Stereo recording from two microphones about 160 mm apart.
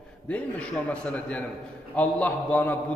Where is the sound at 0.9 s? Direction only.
10° left (ahead or behind).